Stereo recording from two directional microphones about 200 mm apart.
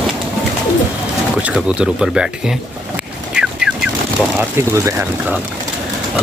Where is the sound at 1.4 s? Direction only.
5° right (ahead or behind).